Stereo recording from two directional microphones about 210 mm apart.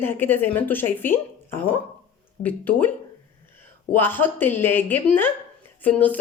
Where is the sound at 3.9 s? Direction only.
10° left (ahead or behind).